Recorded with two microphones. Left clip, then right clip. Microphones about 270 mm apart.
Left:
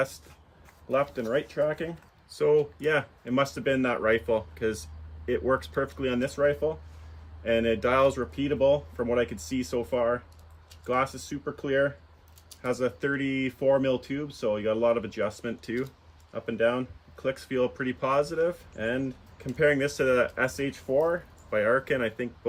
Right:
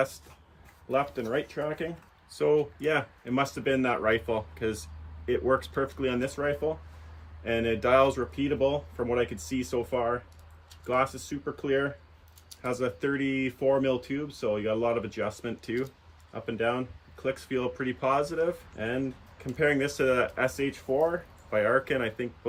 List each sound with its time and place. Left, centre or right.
0.9 s speech: centre